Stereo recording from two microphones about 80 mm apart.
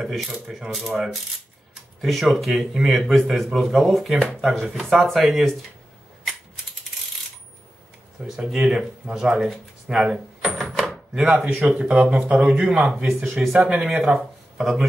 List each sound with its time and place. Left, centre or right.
0.0 s a man's voice: centre
8.2 s speech: centre
11.3 s a man's voice: centre
13.6 s speech: centre
14.1 s a sound: centre